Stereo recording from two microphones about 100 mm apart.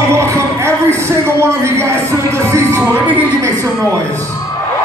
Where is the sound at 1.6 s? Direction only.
30° right (ahead or behind).